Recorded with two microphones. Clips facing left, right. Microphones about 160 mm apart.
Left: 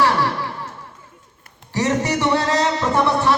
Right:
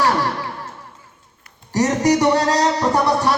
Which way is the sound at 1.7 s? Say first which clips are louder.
Right 4 dB; 40° right (ahead or behind).